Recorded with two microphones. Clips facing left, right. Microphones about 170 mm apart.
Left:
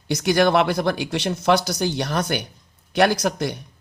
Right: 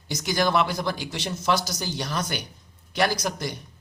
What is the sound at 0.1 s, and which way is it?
Speech, 60° left (ahead or behind).